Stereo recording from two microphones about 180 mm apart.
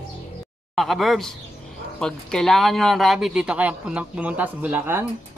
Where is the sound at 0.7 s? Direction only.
Centre (ahead or behind).